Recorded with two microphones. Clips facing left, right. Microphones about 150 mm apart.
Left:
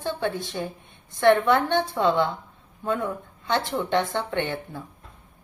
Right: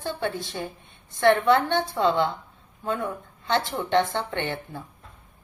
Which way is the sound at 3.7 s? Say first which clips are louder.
Right 1 dB; 20° right (ahead or behind).